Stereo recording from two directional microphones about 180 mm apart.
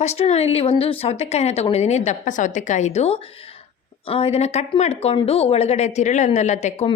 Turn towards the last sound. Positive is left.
turn(degrees=40)  # may be behind; listen again after turning